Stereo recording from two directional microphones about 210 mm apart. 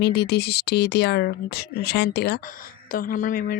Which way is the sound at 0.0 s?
50° left (ahead or behind).